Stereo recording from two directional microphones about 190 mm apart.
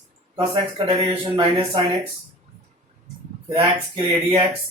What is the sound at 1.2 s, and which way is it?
Speech, 25° right (ahead or behind).